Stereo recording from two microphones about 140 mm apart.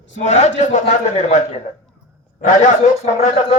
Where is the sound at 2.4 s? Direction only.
60° left (ahead or behind).